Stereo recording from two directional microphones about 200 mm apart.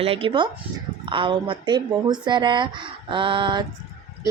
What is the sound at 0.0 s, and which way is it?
Speech, 30° right (ahead or behind).